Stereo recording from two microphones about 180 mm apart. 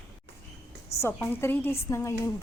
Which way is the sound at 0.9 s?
35° left (ahead or behind).